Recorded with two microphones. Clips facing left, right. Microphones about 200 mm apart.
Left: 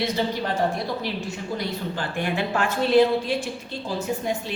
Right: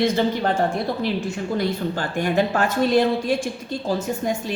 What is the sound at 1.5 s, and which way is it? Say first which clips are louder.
A woman's voice: right 5 dB; 45° right (ahead or behind).